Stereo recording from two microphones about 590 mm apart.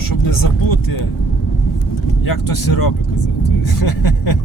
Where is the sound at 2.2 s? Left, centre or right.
Left.